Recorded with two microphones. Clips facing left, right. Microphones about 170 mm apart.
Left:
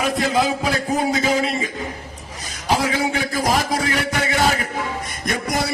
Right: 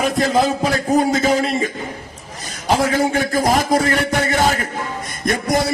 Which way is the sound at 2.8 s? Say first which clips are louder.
Right 4 dB; 45° right (ahead or behind).